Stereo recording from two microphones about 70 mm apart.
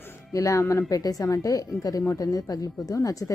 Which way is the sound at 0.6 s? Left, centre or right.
Left.